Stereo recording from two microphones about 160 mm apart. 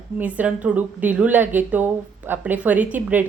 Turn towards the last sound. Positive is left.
turn(degrees=-10)  # may be behind; listen again after turning